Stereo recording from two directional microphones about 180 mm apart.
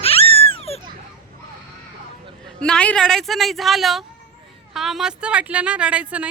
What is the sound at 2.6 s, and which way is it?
Speech, 5° left (ahead or behind).